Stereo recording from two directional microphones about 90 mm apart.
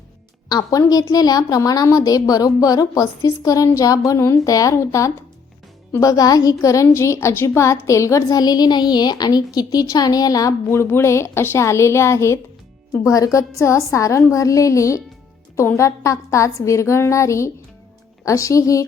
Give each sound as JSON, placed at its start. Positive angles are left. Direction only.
{"t": 0.5, "sound": "a woman's voice", "side_deg": 45}
{"t": 10.7, "sound": "a woman's voice", "side_deg": 25}